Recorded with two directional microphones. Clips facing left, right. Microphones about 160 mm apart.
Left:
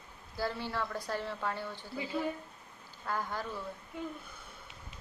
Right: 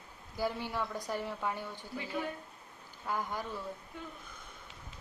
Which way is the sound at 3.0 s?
15° right (ahead or behind).